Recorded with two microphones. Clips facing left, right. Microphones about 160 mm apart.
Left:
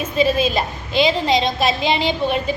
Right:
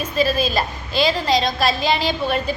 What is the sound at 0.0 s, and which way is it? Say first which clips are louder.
A woman's voice: left 2 dB; 20° left (ahead or behind).